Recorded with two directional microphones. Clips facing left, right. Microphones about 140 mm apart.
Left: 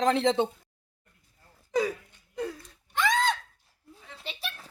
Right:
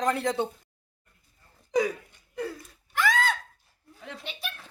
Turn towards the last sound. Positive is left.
turn(degrees=30)  # may be behind; listen again after turning